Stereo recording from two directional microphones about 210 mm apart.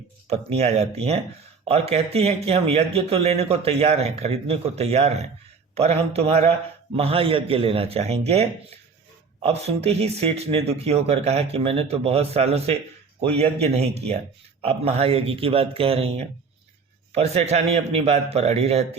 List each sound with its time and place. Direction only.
0.3 s speech: 30° right (ahead or behind)